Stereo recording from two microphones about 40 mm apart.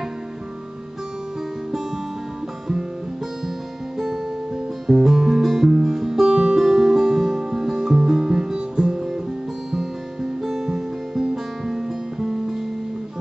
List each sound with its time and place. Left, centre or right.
4.8 s music: centre; by 9.0 s right
9.7 s guitar: centre